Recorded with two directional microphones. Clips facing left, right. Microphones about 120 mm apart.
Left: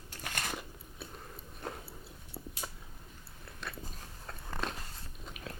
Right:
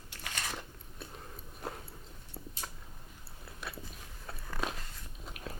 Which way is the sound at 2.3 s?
10° left (ahead or behind).